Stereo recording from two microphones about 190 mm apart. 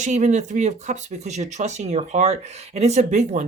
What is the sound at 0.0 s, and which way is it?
Speech, 40° right (ahead or behind).